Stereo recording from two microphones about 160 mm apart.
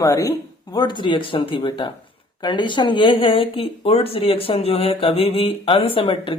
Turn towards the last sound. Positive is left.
turn(degrees=35)  # may be behind; listen again after turning